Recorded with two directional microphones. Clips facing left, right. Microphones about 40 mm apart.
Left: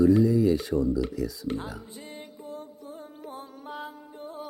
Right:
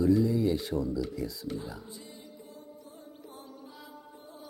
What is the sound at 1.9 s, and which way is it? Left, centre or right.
Music, left.